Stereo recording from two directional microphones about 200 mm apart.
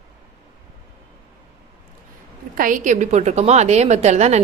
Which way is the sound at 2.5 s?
40° right (ahead or behind).